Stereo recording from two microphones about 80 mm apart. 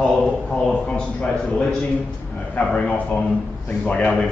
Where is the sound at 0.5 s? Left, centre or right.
Centre.